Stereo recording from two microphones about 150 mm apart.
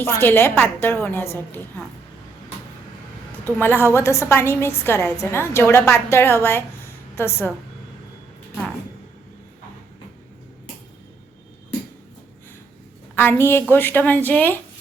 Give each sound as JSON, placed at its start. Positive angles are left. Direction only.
{"t": 0.0, "sound": "a woman's voice", "side_deg": 15}
{"t": 3.4, "sound": "a woman's voice", "side_deg": 15}
{"t": 13.1, "sound": "a woman's voice", "side_deg": 15}